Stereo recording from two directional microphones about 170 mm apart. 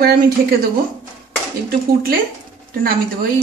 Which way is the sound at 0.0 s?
60° right (ahead or behind).